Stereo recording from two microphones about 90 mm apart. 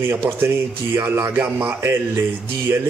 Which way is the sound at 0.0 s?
25° right (ahead or behind).